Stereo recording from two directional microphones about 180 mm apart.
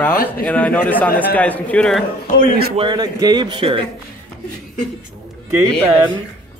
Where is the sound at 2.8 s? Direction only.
25° right (ahead or behind).